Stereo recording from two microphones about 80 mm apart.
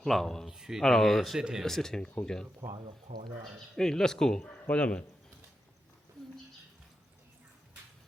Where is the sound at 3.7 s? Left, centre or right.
Centre.